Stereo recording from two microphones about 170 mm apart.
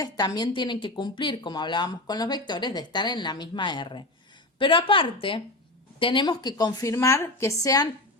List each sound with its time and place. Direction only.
0.0 s speech: 25° left (ahead or behind)